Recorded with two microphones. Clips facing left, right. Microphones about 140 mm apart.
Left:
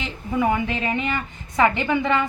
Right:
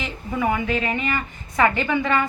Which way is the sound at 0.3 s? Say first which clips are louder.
Left 1 dB; 20° left (ahead or behind).